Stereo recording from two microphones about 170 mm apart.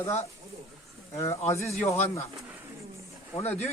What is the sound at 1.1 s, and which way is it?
Speech, 15° left (ahead or behind).